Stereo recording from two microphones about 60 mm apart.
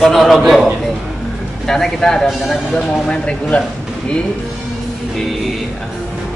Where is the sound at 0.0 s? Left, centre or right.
Centre.